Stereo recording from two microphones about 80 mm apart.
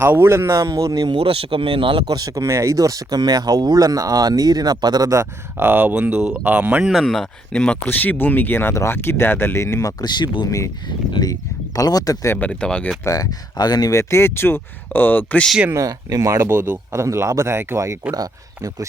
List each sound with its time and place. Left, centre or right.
0.0 s speech: right
2.0 s speech: right
5.2 s speech: right
6.9 s speech: centre
7.5 s speech: centre; by 9.9 s left
10.0 s speech: left
12.4 s speech: centre
13.1 s speech: left
14.0 s speech: left
15.7 s speech: right
16.4 s speech: right
16.9 s speech: right
18.1 s speech: right